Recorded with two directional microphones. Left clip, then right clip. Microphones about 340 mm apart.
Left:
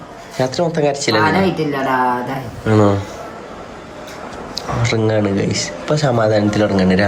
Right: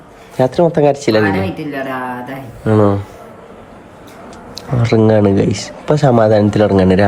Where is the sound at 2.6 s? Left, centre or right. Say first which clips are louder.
Right 2 dB; centre.